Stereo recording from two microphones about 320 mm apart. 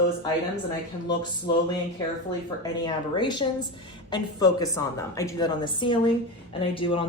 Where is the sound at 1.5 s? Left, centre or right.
Centre.